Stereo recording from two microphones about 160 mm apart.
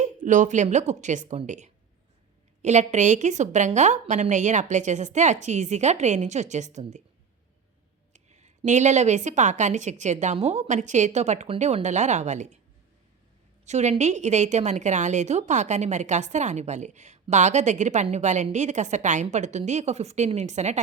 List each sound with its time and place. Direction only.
0.0 s a woman's voice: 50° right (ahead or behind)
8.1 s a woman's voice: 45° right (ahead or behind)
13.7 s a woman's voice: 45° right (ahead or behind)